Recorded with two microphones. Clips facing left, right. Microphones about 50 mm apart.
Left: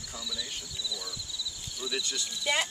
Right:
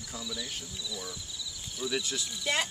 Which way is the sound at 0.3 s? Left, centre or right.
Right.